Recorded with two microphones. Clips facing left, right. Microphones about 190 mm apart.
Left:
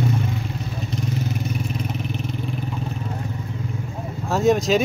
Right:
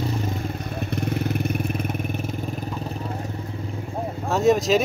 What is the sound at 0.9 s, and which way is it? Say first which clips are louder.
Vehicle: right 2 dB; 60° right (ahead or behind).